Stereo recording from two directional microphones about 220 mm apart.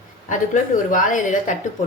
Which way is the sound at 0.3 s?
35° left (ahead or behind).